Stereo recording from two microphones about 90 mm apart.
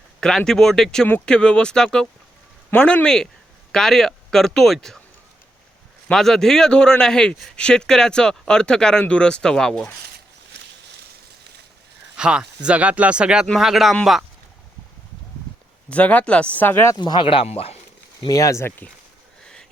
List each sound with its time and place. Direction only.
0.2 s speech: 5° left (ahead or behind)
6.1 s speech: 5° left (ahead or behind)
12.1 s speech: 10° right (ahead or behind)
15.9 s speech: 15° left (ahead or behind)
17.0 s speech: 65° left (ahead or behind); by 17.7 s 90° left
18.3 s speech: 40° left (ahead or behind)